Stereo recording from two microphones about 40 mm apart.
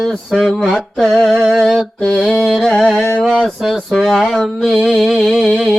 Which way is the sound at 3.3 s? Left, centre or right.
Centre.